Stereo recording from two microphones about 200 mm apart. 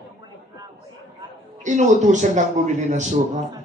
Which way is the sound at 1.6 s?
35° right (ahead or behind).